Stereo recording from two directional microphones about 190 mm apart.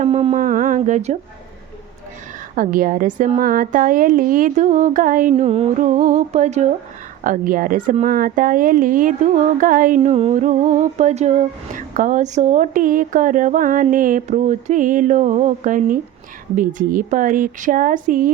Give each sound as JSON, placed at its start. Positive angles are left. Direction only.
{"t": 0.0, "sound": "speech", "side_deg": -35}
{"t": 2.6, "sound": "speech", "side_deg": -45}
{"t": 5.3, "sound": "a sound", "side_deg": -30}
{"t": 7.3, "sound": "speech", "side_deg": -45}
{"t": 13.9, "sound": "a sound", "side_deg": -45}
{"t": 16.6, "sound": "speech", "side_deg": -45}